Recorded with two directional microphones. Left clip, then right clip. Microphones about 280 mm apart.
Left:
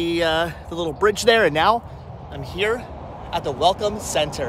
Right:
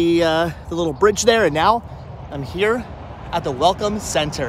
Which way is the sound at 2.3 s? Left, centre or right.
Centre.